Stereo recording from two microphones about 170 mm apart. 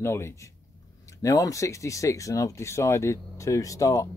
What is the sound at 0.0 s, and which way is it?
Speech, 15° left (ahead or behind).